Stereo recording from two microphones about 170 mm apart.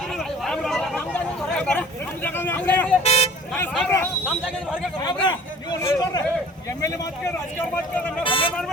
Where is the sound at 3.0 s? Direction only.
40° left (ahead or behind).